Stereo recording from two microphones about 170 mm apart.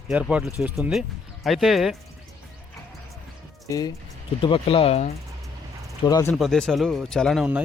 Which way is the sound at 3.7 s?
20° left (ahead or behind).